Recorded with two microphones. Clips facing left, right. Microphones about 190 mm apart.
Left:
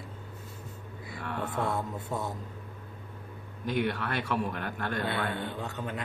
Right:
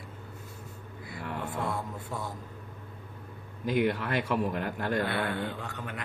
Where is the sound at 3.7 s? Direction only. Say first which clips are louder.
Right 3 dB; 15° right (ahead or behind).